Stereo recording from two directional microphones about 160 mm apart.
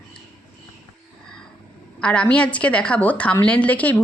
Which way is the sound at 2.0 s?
5° left (ahead or behind).